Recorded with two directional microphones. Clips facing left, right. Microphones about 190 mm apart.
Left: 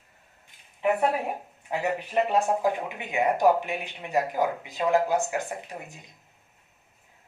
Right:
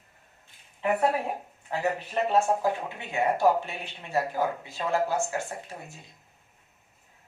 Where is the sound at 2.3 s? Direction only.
15° left (ahead or behind).